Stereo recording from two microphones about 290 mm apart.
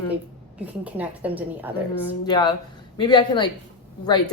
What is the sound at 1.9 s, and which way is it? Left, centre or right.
Speech, centre.